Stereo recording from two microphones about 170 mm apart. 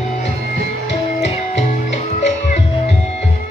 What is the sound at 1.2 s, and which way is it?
Music, 40° left (ahead or behind).